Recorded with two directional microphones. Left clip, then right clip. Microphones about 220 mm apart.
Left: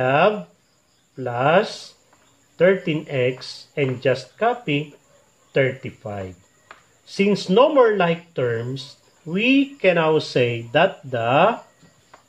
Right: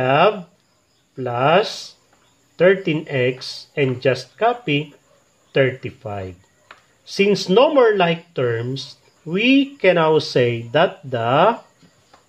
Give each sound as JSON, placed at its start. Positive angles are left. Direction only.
{"t": 0.0, "sound": "speech", "side_deg": -30}